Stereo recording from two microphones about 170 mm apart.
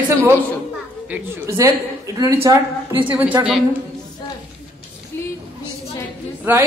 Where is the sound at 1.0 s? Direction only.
10° right (ahead or behind).